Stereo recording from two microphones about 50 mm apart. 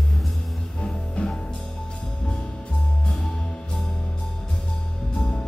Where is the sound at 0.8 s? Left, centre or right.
Left.